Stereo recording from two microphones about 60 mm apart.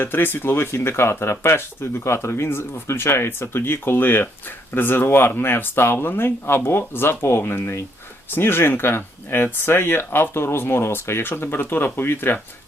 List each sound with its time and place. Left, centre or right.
0.0 s speech: left